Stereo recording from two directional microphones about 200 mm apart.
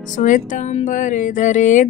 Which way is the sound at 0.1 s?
40° left (ahead or behind).